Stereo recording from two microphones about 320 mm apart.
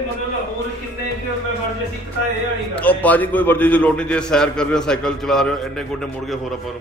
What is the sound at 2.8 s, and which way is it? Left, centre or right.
A man's voice, centre.